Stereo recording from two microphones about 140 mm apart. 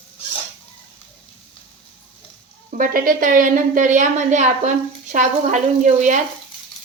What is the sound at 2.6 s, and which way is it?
A woman's voice, 75° right (ahead or behind).